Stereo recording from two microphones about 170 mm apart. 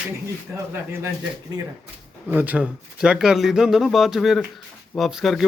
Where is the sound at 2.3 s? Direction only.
10° right (ahead or behind).